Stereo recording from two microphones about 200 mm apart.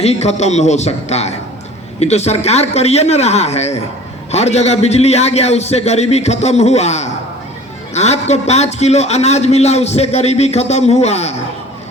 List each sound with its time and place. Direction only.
0.0 s a man's voice: 30° left (ahead or behind)